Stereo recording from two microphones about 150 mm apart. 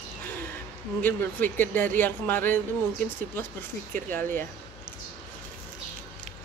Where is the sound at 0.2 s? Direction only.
10° left (ahead or behind).